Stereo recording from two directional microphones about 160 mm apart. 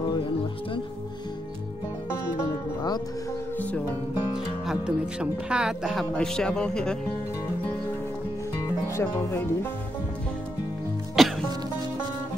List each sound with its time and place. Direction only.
4.6 s speech: 5° right (ahead or behind)
8.8 s speech: 15° left (ahead or behind)
11.2 s music: centre (ahead or behind)